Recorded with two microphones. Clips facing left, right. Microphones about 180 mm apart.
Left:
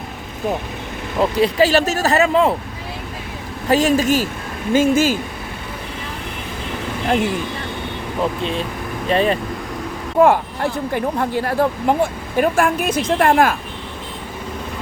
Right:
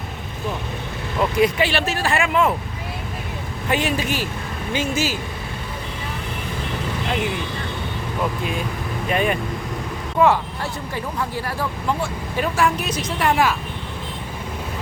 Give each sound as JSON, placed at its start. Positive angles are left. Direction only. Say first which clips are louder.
{"t": 1.2, "sound": "speech", "louder": "left 3 dB", "side_deg": 30}
{"t": 3.7, "sound": "speech", "louder": "left 7 dB", "side_deg": 40}
{"t": 9.0, "sound": "speech", "louder": "left 4 dB", "side_deg": 30}
{"t": 10.2, "sound": "speech", "louder": "left 4 dB", "side_deg": 50}